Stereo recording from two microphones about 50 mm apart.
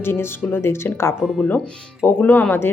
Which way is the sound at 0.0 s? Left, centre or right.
Left.